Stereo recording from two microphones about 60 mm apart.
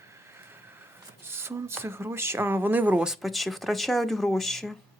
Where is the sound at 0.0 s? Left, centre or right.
Right.